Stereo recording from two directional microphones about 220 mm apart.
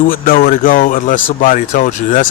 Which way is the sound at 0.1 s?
40° left (ahead or behind).